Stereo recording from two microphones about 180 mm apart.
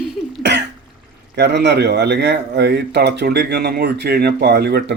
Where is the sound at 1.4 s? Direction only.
70° right (ahead or behind).